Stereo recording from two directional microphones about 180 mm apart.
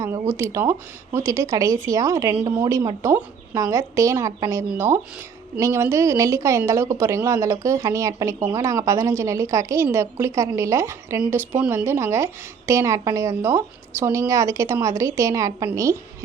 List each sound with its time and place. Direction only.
0.0 s a woman's voice: 15° right (ahead or behind)